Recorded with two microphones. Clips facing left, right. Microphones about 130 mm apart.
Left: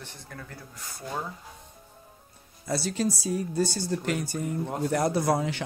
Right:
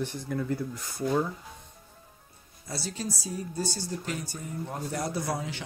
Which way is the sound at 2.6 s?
70° left (ahead or behind).